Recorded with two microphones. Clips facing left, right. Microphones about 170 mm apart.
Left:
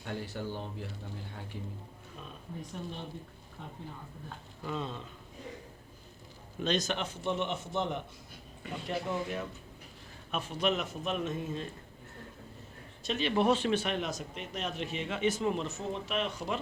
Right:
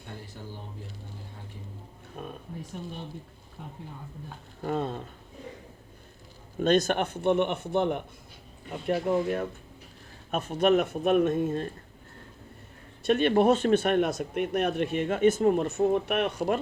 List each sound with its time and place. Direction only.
0.0 s speech: 75° left (ahead or behind)
2.2 s speech: 55° right (ahead or behind)
4.6 s speech: 50° right (ahead or behind)
6.6 s speech: 50° right (ahead or behind)
13.1 s speech: 55° right (ahead or behind)